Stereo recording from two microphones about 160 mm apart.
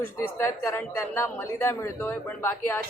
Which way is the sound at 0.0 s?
15° left (ahead or behind).